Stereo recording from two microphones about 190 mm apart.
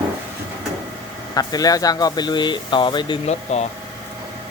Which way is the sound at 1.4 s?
20° left (ahead or behind).